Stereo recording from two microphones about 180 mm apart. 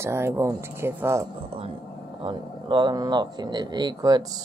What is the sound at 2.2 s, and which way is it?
Speech, 25° right (ahead or behind).